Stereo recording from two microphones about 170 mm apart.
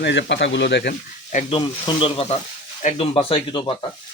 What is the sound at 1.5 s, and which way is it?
Speech, 30° left (ahead or behind).